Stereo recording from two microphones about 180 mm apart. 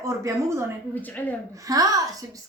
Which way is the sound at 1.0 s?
10° left (ahead or behind).